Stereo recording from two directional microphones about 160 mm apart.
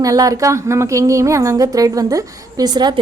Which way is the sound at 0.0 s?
20° right (ahead or behind).